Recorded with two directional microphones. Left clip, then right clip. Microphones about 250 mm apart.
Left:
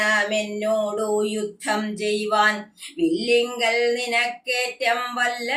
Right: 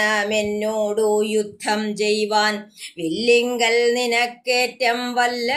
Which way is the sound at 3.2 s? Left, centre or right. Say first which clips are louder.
Right 6 dB; right.